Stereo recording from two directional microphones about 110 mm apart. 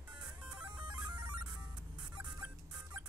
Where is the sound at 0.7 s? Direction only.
40° right (ahead or behind).